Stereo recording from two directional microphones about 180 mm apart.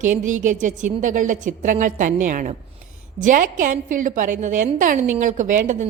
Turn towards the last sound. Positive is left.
turn(degrees=-45)  # may be behind; listen again after turning